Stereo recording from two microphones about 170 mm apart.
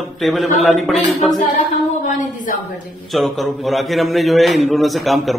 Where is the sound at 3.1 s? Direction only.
Centre (ahead or behind).